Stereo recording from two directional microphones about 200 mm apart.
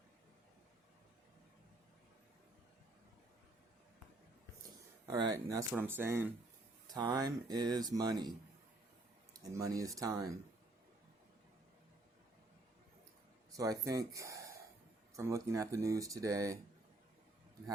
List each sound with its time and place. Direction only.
5.0 s speech: 20° right (ahead or behind)
9.3 s speech: 15° right (ahead or behind)
13.6 s speech: 15° right (ahead or behind)